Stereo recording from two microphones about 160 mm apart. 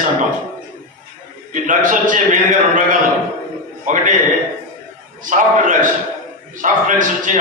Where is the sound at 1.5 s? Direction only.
55° right (ahead or behind).